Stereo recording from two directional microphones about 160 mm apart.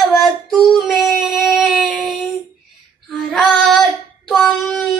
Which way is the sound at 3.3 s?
Centre (ahead or behind).